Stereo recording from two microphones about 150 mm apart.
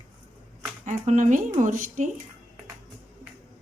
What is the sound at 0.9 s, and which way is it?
Speech, 55° right (ahead or behind).